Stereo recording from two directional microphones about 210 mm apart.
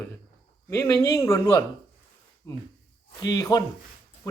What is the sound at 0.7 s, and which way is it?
A man's voice, 15° left (ahead or behind).